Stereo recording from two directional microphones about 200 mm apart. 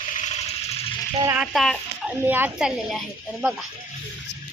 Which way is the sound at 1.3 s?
Centre (ahead or behind).